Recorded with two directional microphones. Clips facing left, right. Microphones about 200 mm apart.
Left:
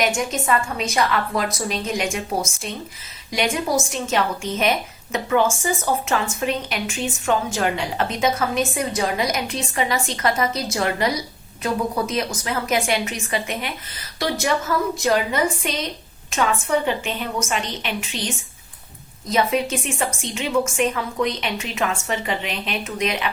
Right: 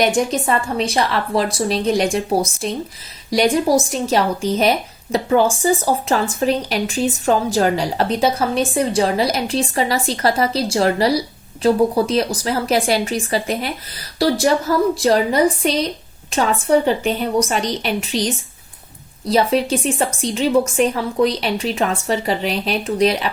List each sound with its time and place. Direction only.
0.0 s speech: 35° right (ahead or behind)